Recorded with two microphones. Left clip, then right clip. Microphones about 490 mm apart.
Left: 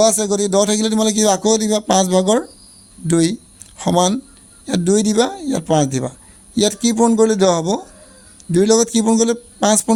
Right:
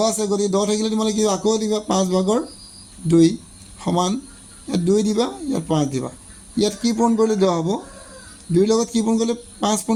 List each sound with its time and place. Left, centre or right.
0.0 s a man's voice: left